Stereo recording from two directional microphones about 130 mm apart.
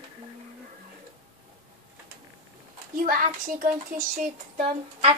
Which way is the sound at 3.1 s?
90° right.